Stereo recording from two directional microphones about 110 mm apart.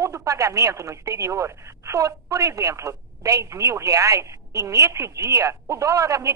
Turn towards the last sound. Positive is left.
turn(degrees=-30)  # may be behind; listen again after turning